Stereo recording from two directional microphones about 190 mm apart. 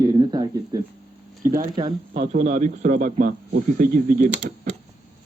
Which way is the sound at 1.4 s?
45° right (ahead or behind).